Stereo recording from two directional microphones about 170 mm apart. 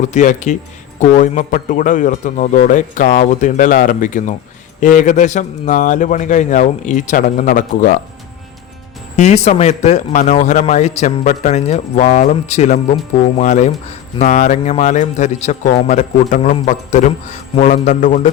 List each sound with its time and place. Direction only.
0.0 s a man's voice: 45° left (ahead or behind)
9.1 s a man's voice: 40° left (ahead or behind)